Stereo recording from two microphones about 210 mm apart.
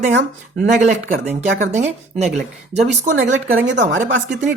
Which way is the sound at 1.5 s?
35° right (ahead or behind).